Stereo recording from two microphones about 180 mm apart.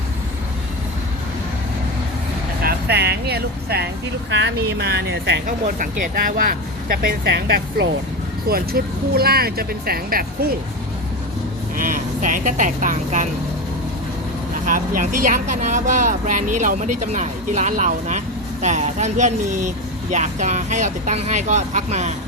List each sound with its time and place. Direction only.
2.6 s speech: 65° right (ahead or behind)
4.3 s speech: 80° right
5.5 s a woman's voice: 45° right (ahead or behind)
11.8 s a woman's voice: 50° right (ahead or behind)
14.7 s a woman's voice: 50° right (ahead or behind)